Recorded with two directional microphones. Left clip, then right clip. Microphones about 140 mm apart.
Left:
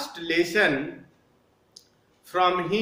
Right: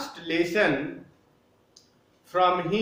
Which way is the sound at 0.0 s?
25° left (ahead or behind).